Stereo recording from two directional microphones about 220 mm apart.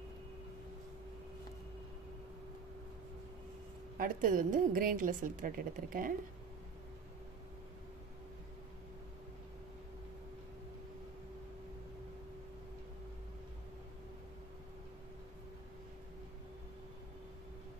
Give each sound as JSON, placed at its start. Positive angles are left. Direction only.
{"t": 4.0, "sound": "a woman's voice", "side_deg": -40}